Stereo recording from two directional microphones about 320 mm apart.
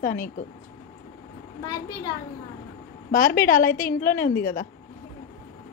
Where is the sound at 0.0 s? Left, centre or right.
Left.